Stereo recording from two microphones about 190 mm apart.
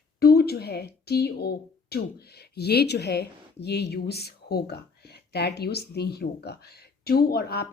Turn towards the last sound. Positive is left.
turn(degrees=55)  # may be behind; listen again after turning